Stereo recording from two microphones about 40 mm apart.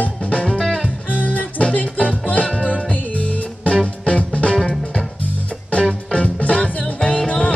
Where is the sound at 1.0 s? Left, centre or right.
Left.